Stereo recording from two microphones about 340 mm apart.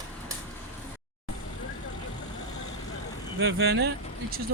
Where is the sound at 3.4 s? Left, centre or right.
Right.